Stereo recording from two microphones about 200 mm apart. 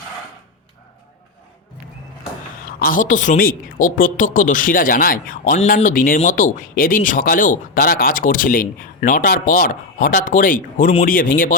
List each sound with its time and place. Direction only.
2.6 s a woman's voice: 45° left (ahead or behind)